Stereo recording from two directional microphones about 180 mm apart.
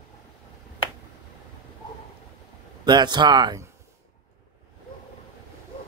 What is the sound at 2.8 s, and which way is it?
Speech, 25° right (ahead or behind).